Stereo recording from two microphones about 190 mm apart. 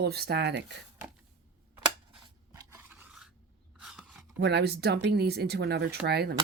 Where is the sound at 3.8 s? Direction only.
5° right (ahead or behind).